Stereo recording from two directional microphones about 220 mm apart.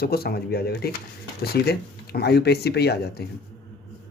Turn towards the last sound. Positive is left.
turn(degrees=45)  # may be behind; listen again after turning